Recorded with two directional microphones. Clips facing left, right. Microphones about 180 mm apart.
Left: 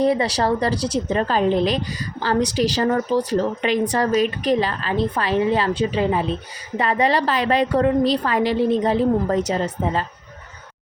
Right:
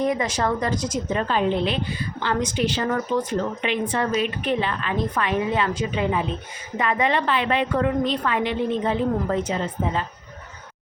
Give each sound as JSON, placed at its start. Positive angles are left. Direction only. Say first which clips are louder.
{"t": 0.0, "sound": "a woman's voice", "louder": "left 4 dB", "side_deg": 35}